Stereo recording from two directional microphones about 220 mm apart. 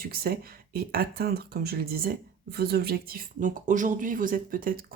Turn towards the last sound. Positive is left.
turn(degrees=-40)  # may be behind; listen again after turning